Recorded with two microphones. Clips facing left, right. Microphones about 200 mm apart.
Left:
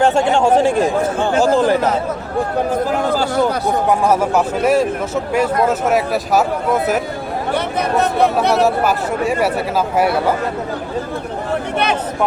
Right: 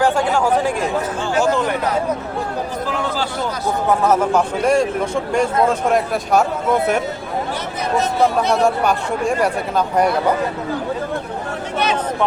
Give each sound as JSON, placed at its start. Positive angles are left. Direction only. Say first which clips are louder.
{"t": 0.0, "sound": "speech", "louder": "left 3 dB", "side_deg": 25}
{"t": 2.9, "sound": "speech", "louder": "left 5 dB", "side_deg": 40}
{"t": 4.0, "sound": "speech", "louder": "left 1 dB", "side_deg": 10}
{"t": 7.5, "sound": "speech", "louder": "left 6 dB", "side_deg": 60}
{"t": 8.6, "sound": "speech", "louder": "left 1 dB", "side_deg": 5}